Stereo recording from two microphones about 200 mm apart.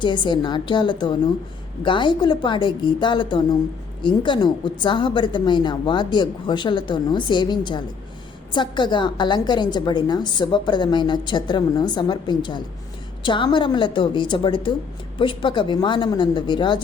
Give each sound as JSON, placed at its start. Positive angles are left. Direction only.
{"t": 0.0, "sound": "a woman's voice", "side_deg": 25}